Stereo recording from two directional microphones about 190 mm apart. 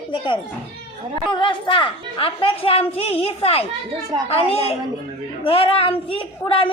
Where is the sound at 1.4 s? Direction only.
25° left (ahead or behind).